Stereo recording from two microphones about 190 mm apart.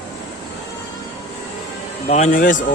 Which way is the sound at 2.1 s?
40° left (ahead or behind).